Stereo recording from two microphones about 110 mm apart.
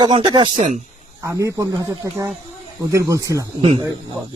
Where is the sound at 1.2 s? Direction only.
30° right (ahead or behind).